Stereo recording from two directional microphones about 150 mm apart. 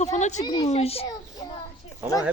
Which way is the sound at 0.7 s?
40° left (ahead or behind).